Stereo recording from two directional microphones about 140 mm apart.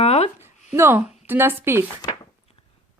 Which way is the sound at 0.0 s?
50° left (ahead or behind).